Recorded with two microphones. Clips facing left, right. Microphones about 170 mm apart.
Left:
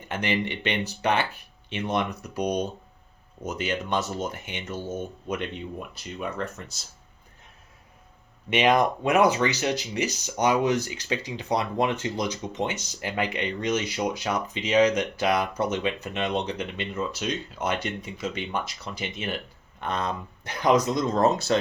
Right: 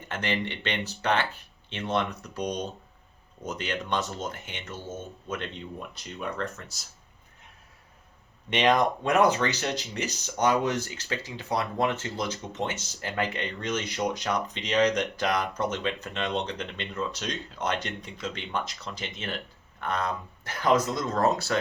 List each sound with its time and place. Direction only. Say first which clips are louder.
0.1 s speech: left 3 dB; 15° left (ahead or behind)
8.4 s speech: left 2 dB; 10° left (ahead or behind)
19.8 s speech: left 1 dB; 20° left (ahead or behind)